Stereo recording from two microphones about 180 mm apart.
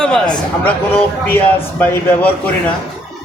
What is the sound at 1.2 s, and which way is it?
A man's voice, 10° left (ahead or behind).